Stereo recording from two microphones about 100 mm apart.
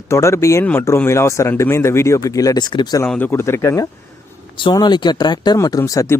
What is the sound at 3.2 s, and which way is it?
Speech, 25° left (ahead or behind).